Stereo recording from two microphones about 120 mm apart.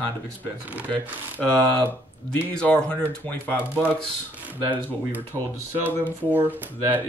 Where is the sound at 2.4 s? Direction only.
10° left (ahead or behind).